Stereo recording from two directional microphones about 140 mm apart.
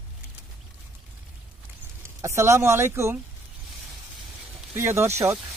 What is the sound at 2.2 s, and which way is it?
Speech, 20° right (ahead or behind).